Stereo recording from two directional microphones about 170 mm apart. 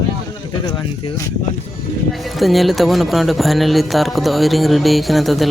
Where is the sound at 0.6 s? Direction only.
25° left (ahead or behind).